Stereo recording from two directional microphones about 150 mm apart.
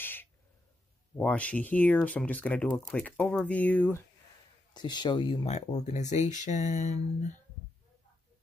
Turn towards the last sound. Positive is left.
turn(degrees=50)  # may be behind; listen again after turning